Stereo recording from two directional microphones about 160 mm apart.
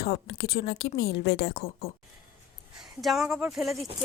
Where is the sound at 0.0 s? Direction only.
75° left (ahead or behind).